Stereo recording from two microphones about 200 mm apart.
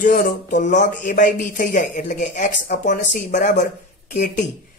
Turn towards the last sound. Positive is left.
turn(degrees=40)  # may be behind; listen again after turning